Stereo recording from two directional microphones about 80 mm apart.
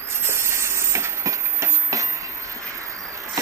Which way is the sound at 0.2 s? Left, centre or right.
Right.